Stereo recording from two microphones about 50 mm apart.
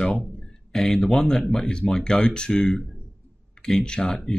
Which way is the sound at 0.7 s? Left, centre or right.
Centre.